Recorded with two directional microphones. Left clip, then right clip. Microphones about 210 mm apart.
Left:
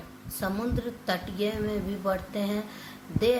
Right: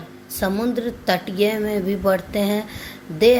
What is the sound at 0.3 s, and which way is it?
A woman's voice, 25° right (ahead or behind).